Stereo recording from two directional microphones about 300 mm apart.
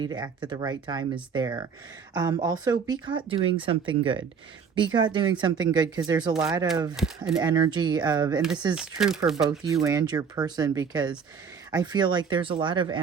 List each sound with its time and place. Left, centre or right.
0.0 s speech: centre
9.0 s speech: centre